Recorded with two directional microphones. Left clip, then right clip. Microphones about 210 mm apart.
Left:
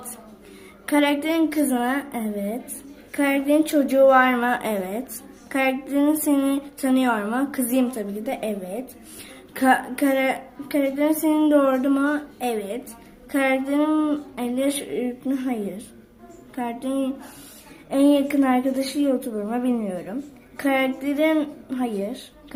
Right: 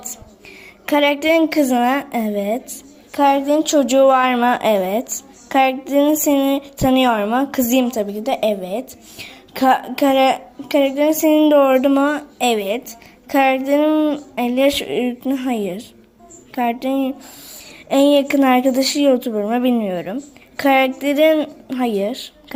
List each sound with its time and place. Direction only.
0.9 s a woman's voice: 30° right (ahead or behind)
3.1 s a woman's voice: 20° right (ahead or behind)
16.6 s a woman's voice: 35° right (ahead or behind)